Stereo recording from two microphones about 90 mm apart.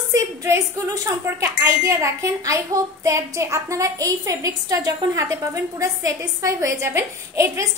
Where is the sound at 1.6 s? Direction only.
35° right (ahead or behind).